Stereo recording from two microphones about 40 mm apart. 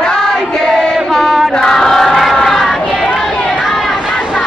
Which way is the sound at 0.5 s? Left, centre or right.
Centre.